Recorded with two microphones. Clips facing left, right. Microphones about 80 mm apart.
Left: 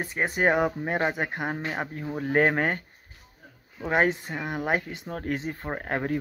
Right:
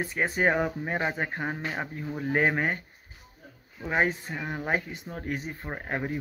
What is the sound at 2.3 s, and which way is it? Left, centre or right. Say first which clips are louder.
Speech: left 3 dB; left.